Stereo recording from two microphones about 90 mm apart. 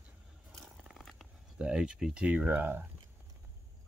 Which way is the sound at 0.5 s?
Centre (ahead or behind).